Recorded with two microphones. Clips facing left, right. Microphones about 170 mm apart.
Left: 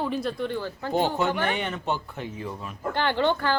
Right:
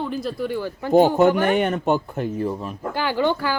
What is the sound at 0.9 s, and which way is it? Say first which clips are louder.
Speech: right 10 dB; 45° right (ahead or behind).